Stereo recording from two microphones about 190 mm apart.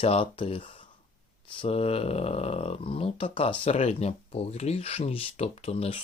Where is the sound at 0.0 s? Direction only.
30° left (ahead or behind).